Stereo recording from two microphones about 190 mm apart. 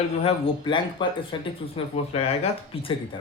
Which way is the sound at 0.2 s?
30° left (ahead or behind).